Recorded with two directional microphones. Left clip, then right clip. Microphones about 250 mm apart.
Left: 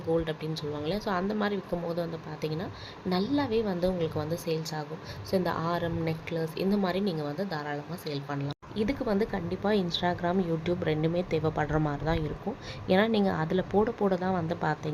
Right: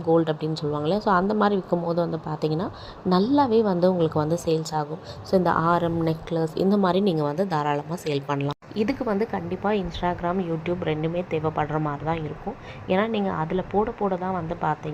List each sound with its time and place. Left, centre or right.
0.1 s a woman's voice: centre
8.8 s a woman's voice: centre